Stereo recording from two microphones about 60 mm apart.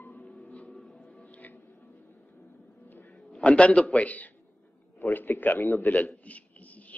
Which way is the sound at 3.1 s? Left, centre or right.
Centre.